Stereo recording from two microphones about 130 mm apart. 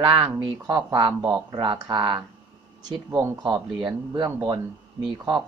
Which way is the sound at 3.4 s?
35° right (ahead or behind).